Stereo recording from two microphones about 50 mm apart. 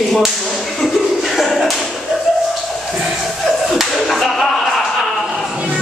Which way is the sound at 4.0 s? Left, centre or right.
Centre.